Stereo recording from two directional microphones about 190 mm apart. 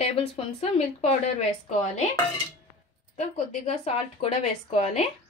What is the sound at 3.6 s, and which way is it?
Speech, 35° left (ahead or behind).